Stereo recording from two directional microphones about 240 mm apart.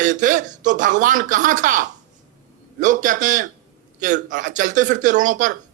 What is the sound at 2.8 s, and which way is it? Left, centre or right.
Speech, right.